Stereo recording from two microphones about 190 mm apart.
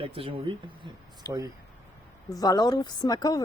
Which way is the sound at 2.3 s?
20° left (ahead or behind).